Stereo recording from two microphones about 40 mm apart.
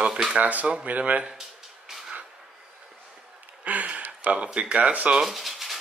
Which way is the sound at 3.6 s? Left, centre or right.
Right.